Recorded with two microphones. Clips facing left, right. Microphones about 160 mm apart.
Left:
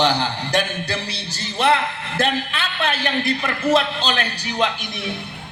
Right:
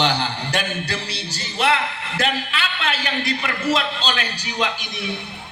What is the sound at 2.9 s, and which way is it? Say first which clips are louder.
A man's voice: left 3 dB; 55° left (ahead or behind).